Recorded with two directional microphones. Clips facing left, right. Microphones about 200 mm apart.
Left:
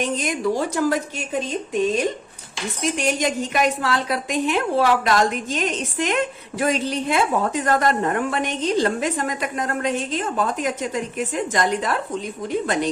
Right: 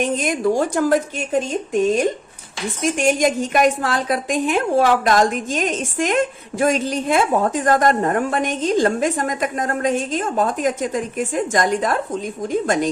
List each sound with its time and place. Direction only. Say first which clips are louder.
0.0 s a woman's voice: right 3 dB; 50° right (ahead or behind)